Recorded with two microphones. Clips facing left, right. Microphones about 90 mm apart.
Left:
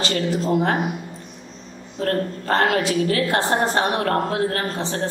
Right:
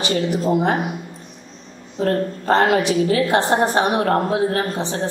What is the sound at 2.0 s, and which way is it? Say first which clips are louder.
A woman's voice: right 3 dB; 20° right (ahead or behind).